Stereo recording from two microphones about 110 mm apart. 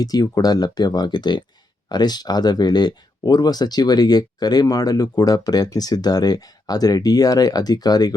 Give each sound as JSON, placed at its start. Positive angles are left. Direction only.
{"t": 0.0, "sound": "speech", "side_deg": 35}